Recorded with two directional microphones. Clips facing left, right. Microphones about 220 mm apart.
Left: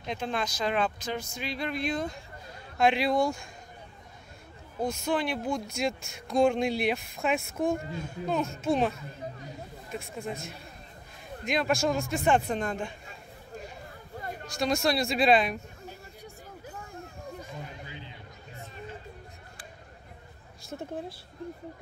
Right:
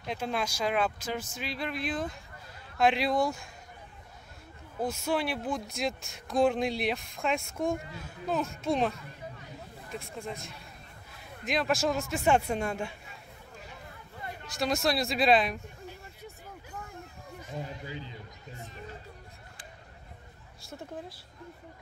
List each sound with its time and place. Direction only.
0.0 s speech: 5° right (ahead or behind)
4.7 s speech: 5° right (ahead or behind)
9.9 s speech: centre (ahead or behind)
14.6 s speech: centre (ahead or behind)
17.6 s a sound: 35° right (ahead or behind)
20.6 s a woman's voice: 25° left (ahead or behind)